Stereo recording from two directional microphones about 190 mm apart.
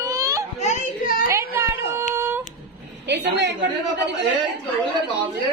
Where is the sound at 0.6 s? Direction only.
45° left (ahead or behind).